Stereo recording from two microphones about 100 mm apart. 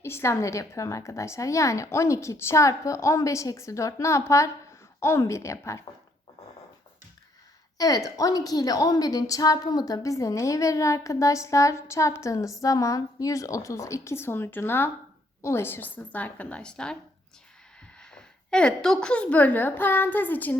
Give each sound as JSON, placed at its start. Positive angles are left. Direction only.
{"t": 0.0, "sound": "a woman's voice", "side_deg": 25}
{"t": 7.8, "sound": "a woman's voice", "side_deg": 35}
{"t": 18.0, "sound": "a woman's voice", "side_deg": 5}